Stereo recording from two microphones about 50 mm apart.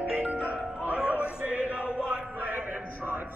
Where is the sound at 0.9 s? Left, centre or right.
Right.